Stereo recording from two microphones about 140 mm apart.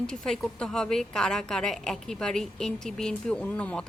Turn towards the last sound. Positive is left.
turn(degrees=10)  # may be behind; listen again after turning